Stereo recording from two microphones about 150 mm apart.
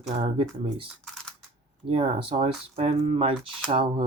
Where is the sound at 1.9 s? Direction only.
35° right (ahead or behind).